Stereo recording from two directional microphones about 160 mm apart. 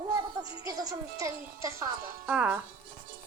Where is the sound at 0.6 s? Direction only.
20° right (ahead or behind).